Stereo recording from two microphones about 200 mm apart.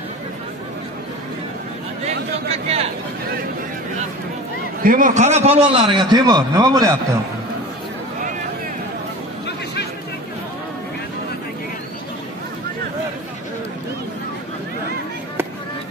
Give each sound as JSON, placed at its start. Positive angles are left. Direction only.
{"t": 2.0, "sound": "speech", "side_deg": -30}
{"t": 4.8, "sound": "a man's voice", "side_deg": -40}